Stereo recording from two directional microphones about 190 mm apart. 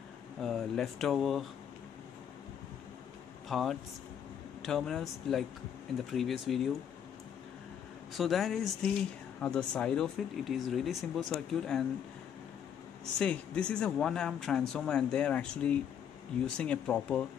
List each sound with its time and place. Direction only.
0.4 s speech: centre (ahead or behind)
3.4 s speech: centre (ahead or behind)
8.1 s speech: centre (ahead or behind)
13.2 s speech: 5° left (ahead or behind)